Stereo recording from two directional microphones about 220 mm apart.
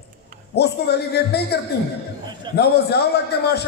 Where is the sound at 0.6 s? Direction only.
50° left (ahead or behind).